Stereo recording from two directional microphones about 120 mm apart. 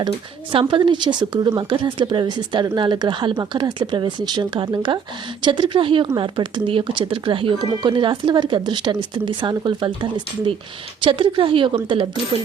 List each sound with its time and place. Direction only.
0.7 s a woman's voice: 40° right (ahead or behind)